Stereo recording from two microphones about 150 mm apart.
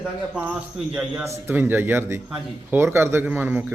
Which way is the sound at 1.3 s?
15° right (ahead or behind).